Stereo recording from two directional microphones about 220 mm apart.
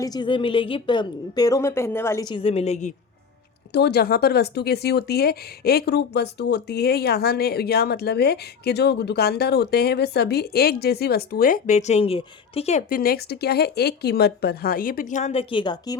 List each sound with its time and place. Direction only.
0.0 s a woman's voice: 20° left (ahead or behind)
3.7 s speech: 50° left (ahead or behind); by 16.0 s 20° left (ahead or behind)